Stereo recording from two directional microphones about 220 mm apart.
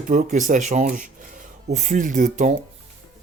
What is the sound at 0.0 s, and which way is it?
Speech, 35° right (ahead or behind).